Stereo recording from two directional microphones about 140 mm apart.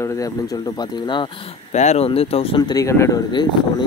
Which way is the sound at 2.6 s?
25° left (ahead or behind).